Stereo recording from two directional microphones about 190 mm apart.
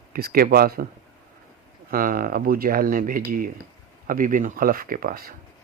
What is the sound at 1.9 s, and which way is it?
Speech, 50° right (ahead or behind).